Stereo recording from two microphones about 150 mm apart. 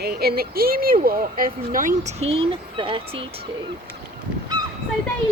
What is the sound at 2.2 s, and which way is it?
Speech, 40° right (ahead or behind).